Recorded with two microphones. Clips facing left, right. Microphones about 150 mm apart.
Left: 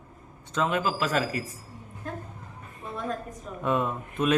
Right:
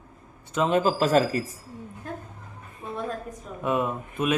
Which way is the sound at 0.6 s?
30° right (ahead or behind).